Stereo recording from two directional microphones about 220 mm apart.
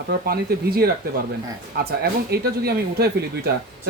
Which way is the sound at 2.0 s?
45° right (ahead or behind).